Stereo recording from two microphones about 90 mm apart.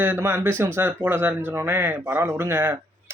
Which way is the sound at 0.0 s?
25° right (ahead or behind).